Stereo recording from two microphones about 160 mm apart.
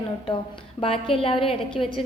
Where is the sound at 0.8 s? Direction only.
35° left (ahead or behind).